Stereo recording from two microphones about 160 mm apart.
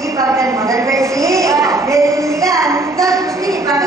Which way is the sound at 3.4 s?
20° right (ahead or behind).